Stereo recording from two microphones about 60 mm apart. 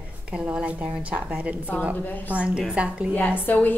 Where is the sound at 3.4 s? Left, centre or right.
Left.